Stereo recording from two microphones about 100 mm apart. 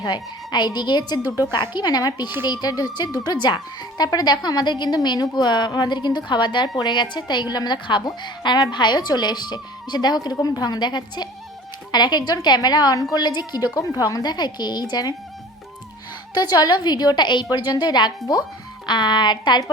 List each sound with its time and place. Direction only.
0.0 s a woman's voice: 45° left (ahead or behind)
16.3 s speech: 40° left (ahead or behind)